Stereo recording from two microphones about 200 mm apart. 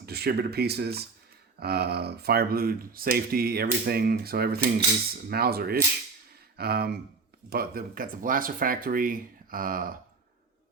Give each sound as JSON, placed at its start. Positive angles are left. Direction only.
{"t": 0.0, "sound": "speech", "side_deg": -50}